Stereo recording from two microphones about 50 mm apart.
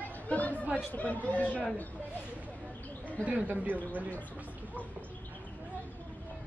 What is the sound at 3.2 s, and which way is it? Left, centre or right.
Speech, right.